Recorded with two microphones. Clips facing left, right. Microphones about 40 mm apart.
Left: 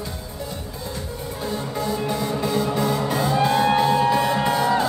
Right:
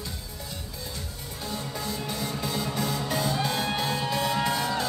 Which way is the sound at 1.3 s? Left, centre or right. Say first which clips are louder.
Left 7 dB; left.